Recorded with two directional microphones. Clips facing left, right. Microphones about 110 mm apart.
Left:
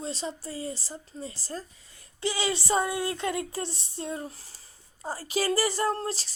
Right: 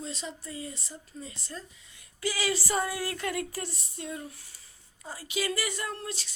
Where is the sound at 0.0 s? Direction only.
35° left (ahead or behind).